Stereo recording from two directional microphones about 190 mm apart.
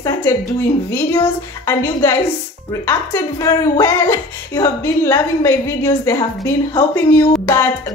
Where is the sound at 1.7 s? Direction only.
15° left (ahead or behind).